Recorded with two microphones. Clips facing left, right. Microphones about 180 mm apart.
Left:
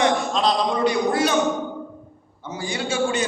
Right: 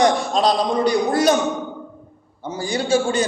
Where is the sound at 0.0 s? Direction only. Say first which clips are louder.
Right 3 dB; 40° right (ahead or behind).